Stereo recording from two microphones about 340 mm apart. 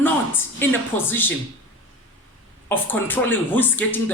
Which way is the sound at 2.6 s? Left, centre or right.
Centre.